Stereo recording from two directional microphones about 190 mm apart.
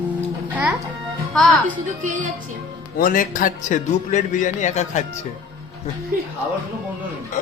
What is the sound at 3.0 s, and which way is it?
A man's voice, 45° left (ahead or behind).